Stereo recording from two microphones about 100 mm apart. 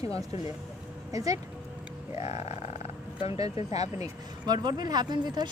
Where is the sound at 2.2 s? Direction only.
90° left.